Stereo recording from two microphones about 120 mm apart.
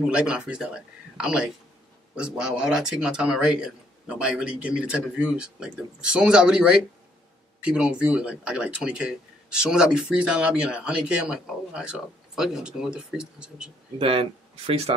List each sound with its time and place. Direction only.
0.0 s speech: 10° right (ahead or behind)
13.9 s speech: 50° right (ahead or behind)